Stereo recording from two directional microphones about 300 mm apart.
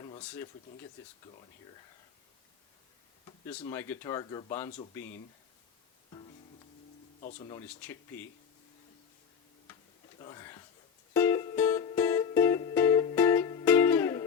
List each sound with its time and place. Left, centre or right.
0.2 s speech: centre
3.2 s a sound: centre
3.7 s speech: centre
7.2 s speech: left
7.7 s speech: centre
10.2 s a sound: centre
11.1 s music: centre